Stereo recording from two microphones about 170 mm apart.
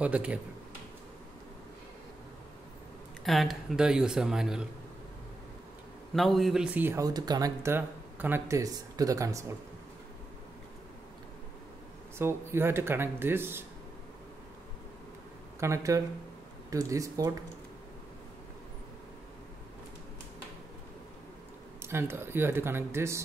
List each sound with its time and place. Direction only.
0.0 s speech: 5° right (ahead or behind)
3.3 s speech: centre (ahead or behind)
6.1 s speech: centre (ahead or behind); by 9.6 s 20° right (ahead or behind)
12.2 s speech: 15° right (ahead or behind)
15.6 s speech: 15° right (ahead or behind)
21.8 s speech: 15° right (ahead or behind)